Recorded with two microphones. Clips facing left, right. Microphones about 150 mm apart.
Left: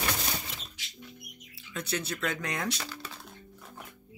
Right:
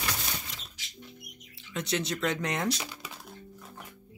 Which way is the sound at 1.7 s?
20° right (ahead or behind).